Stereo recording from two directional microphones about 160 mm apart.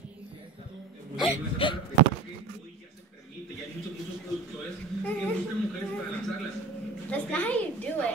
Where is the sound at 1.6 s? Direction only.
30° left (ahead or behind).